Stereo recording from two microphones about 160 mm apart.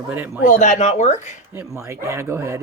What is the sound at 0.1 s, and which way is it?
Speech, 10° right (ahead or behind).